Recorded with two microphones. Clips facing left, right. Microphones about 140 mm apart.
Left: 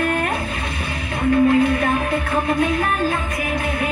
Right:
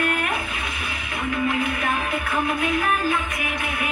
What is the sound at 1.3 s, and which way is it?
Music, 35° left (ahead or behind).